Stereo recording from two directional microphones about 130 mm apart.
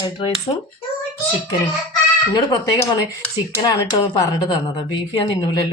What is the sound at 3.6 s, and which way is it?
A woman's voice, 35° left (ahead or behind).